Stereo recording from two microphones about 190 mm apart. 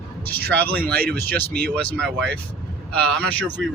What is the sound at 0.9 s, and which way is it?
Speech, 55° right (ahead or behind).